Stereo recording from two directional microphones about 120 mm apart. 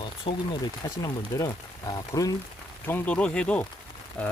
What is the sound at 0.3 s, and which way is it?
Speech, 90° left.